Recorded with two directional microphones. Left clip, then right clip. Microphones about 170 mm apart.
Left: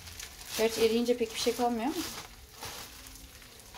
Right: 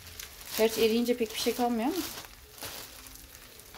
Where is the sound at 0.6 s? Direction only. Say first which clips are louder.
Right 1 dB; 20° right (ahead or behind).